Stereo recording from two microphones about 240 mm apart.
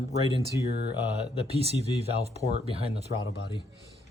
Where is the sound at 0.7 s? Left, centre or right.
Left.